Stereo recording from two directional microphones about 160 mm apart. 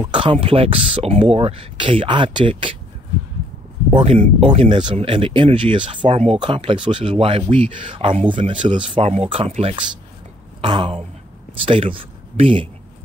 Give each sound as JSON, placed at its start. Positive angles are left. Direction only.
{"t": 0.0, "sound": "speech", "side_deg": -30}
{"t": 3.9, "sound": "speech", "side_deg": -35}